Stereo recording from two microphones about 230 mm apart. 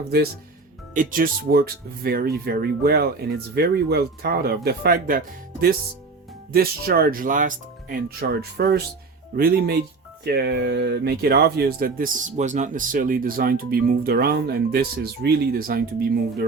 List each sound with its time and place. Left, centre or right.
0.9 s speech: right